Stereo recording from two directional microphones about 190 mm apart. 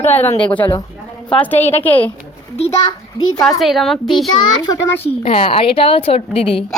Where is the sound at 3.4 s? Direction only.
Centre (ahead or behind).